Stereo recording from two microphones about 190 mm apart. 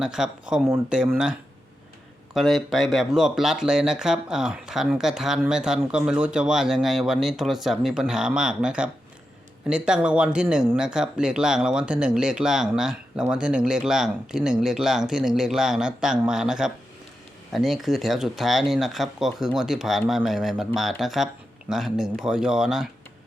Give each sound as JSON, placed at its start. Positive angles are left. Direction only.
{"t": 0.0, "sound": "speech", "side_deg": -5}